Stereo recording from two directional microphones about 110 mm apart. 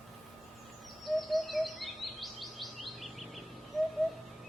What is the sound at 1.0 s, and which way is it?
Bird, centre (ahead or behind).